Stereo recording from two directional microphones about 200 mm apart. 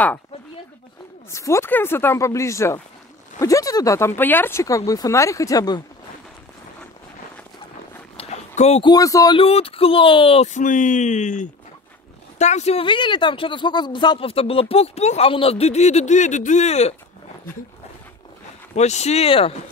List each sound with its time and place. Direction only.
1.3 s speech: 15° left (ahead or behind)
8.2 s a sound: 30° left (ahead or behind)
8.9 s speech: 15° left (ahead or behind); by 16.9 s 35° left (ahead or behind)
18.8 s speech: 35° left (ahead or behind)